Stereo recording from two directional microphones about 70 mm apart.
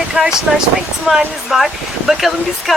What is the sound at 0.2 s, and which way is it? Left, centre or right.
Speech, centre.